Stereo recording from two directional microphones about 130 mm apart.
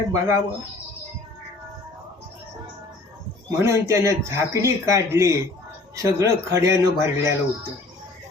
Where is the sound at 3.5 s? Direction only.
25° right (ahead or behind).